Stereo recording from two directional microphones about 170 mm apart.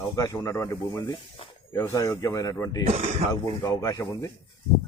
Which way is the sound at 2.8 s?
40° right (ahead or behind).